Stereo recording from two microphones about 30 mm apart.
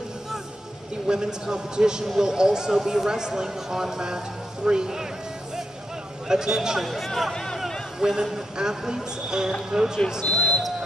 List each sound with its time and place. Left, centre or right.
1.0 s a man's voice: right
6.2 s a man's voice: right
6.8 s speech: centre
8.0 s a man's voice: centre
10.2 s basketball bounce: left